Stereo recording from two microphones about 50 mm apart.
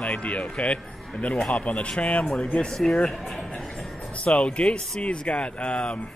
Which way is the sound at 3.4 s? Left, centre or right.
Centre.